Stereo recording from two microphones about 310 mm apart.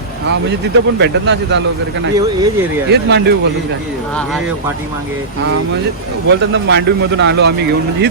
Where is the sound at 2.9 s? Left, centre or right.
Right.